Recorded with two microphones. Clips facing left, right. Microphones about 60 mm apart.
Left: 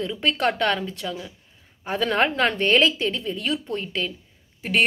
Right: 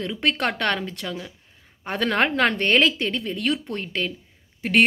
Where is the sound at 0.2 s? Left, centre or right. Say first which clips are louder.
Left 1 dB; right.